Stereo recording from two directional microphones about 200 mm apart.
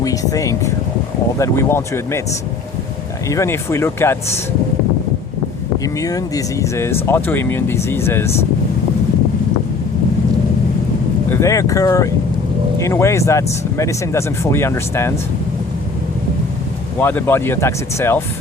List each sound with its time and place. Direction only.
0.0 s speech: 15° left (ahead or behind)
3.2 s speech: 15° left (ahead or behind)
5.8 s speech: 15° left (ahead or behind)
11.3 s speech: 15° left (ahead or behind)
17.0 s speech: 10° left (ahead or behind)